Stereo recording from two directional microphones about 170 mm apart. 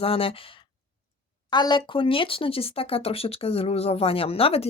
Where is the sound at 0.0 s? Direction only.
35° left (ahead or behind).